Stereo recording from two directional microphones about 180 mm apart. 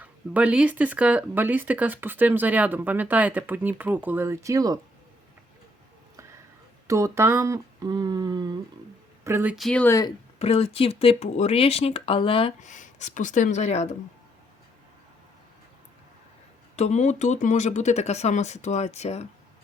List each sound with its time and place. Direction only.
0.0 s speech: 10° right (ahead or behind)
6.8 s speech: 15° right (ahead or behind)
9.2 s speech: 10° right (ahead or behind)
9.6 s speech: 5° left (ahead or behind)
10.3 s speech: 35° left (ahead or behind)
16.7 s speech: 40° left (ahead or behind)